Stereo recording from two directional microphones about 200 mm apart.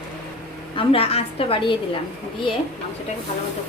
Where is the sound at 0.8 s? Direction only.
30° left (ahead or behind).